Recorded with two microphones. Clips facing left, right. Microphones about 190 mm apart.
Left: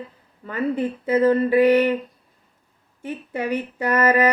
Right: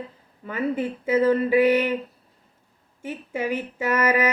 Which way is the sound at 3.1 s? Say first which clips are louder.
Left 2 dB; 5° right (ahead or behind).